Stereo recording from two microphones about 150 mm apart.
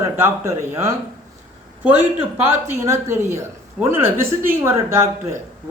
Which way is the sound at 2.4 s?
15° right (ahead or behind).